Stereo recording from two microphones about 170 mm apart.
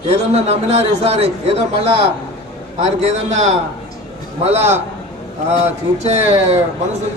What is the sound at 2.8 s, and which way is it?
A man's voice, 40° right (ahead or behind).